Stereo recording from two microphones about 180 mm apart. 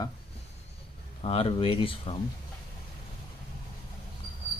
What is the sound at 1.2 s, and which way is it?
Speech, 30° left (ahead or behind).